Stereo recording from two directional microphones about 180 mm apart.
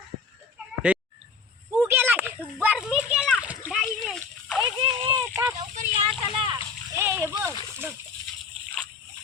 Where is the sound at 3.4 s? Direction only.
5° right (ahead or behind).